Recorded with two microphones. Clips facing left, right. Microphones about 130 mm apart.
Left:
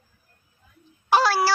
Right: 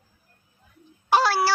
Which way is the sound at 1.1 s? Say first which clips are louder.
Left 1 dB; 90° left.